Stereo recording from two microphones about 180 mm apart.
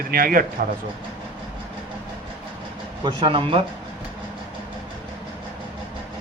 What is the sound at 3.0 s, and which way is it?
Speech, 25° right (ahead or behind).